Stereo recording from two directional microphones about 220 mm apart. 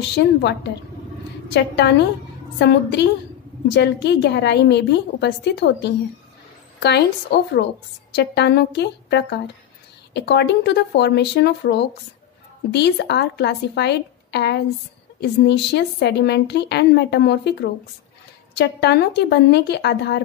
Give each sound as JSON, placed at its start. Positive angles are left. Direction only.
{"t": 0.1, "sound": "a woman's voice", "side_deg": 50}